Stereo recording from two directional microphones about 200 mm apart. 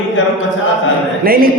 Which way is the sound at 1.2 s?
45° right (ahead or behind).